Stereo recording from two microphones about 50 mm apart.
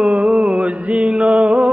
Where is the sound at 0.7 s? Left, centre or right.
Right.